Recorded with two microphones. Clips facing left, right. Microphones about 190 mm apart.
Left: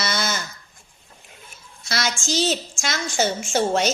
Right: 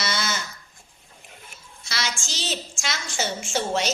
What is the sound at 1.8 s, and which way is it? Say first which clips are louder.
Child singing: left 6 dB; 45° left (ahead or behind).